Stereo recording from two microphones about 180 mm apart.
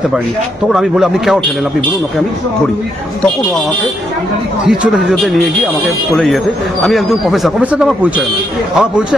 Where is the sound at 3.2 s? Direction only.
Centre (ahead or behind).